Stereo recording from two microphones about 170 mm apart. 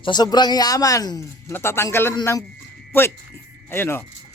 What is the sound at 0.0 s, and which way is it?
A man's voice, 25° left (ahead or behind).